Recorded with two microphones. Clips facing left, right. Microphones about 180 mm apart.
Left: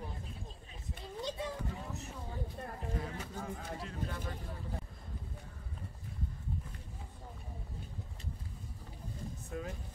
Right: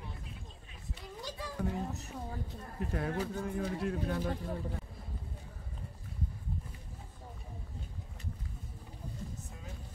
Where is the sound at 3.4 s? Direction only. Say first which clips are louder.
Right 8 dB; 60° right (ahead or behind).